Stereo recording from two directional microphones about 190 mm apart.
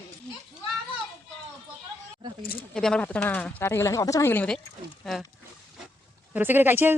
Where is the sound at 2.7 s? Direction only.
5° left (ahead or behind).